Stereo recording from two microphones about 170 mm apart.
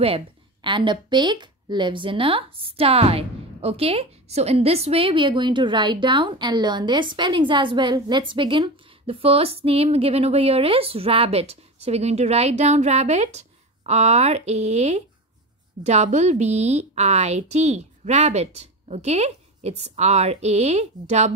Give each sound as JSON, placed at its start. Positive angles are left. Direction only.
{"t": 0.0, "sound": "a woman's voice", "side_deg": -30}